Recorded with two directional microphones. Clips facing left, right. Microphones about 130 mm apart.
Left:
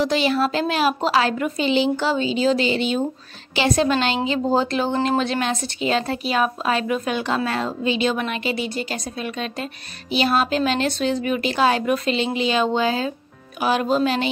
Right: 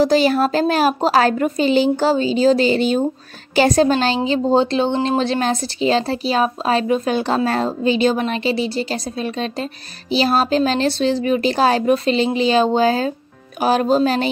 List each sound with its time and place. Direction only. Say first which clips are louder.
0.0 s a woman's voice: right 5 dB; 40° right (ahead or behind)